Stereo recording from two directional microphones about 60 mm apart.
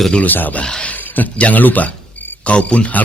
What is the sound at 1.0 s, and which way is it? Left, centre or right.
Speech, left.